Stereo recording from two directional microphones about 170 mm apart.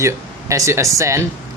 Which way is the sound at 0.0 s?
15° right (ahead or behind).